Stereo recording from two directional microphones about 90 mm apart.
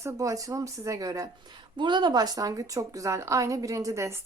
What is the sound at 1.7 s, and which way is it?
Speech, 60° right (ahead or behind).